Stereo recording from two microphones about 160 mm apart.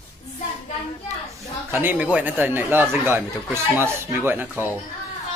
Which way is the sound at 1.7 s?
10° right (ahead or behind).